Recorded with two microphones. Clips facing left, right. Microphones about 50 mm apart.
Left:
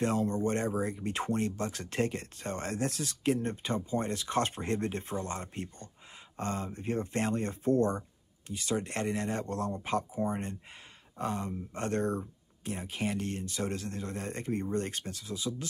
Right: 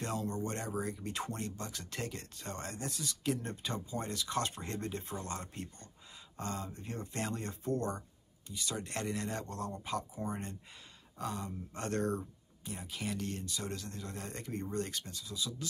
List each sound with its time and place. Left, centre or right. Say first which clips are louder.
0.0 s speech: left 8 dB; left
2.7 s speech: left 8 dB; left
12.6 s speech: left 6 dB; left